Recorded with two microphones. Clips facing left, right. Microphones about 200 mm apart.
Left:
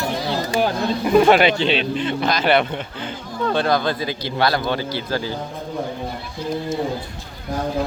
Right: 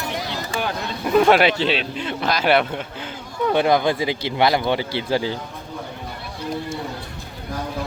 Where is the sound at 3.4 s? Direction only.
15° right (ahead or behind).